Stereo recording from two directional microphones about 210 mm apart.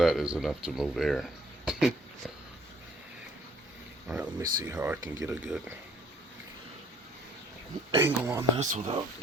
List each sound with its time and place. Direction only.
0.0 s speech: centre (ahead or behind)
4.0 s speech: 5° right (ahead or behind)
7.9 s speech: 15° right (ahead or behind)
8.5 s speech: 30° right (ahead or behind)